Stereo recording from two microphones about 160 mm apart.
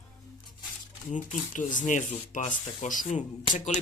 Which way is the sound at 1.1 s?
50° left (ahead or behind).